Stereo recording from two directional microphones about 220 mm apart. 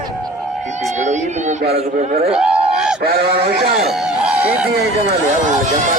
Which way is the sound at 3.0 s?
45° right (ahead or behind).